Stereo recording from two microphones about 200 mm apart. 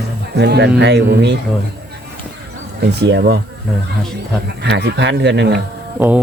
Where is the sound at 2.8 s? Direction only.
60° right (ahead or behind).